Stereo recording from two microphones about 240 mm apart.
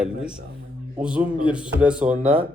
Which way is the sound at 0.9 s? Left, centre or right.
Centre.